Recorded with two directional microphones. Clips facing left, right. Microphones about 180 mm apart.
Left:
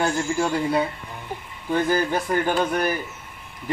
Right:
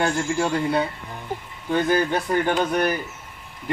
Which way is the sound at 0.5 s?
10° left (ahead or behind).